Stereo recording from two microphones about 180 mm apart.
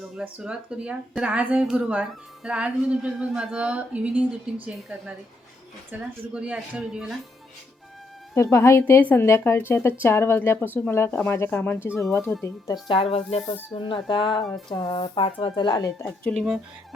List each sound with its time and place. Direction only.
0.0 s speech: 5° right (ahead or behind)
8.4 s speech: 15° left (ahead or behind)
16.2 s speech: 5° left (ahead or behind)